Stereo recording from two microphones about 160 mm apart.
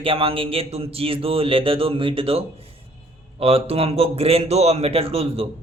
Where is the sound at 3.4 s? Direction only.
35° right (ahead or behind).